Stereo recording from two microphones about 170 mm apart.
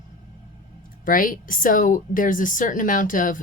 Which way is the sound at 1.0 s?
55° left (ahead or behind).